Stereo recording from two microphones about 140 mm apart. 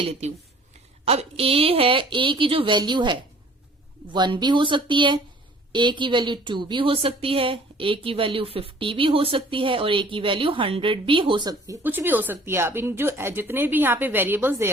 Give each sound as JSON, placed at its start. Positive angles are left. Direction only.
{"t": 0.0, "sound": "a woman's voice", "side_deg": -50}
{"t": 11.8, "sound": "speech", "side_deg": -15}